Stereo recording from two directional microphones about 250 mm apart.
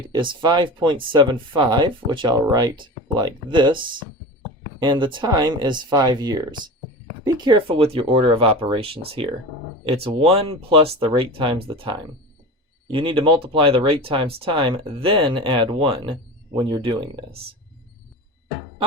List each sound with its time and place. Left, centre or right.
0.1 s speech: centre
12.9 s speech: right